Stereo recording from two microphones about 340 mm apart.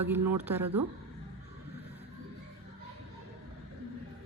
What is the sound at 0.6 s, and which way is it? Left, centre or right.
Speech, right.